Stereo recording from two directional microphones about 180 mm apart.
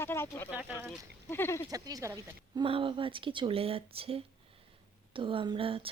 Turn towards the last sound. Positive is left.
turn(degrees=-30)  # may be behind; listen again after turning